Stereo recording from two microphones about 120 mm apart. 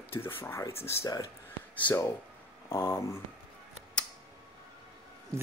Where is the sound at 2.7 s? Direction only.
20° left (ahead or behind).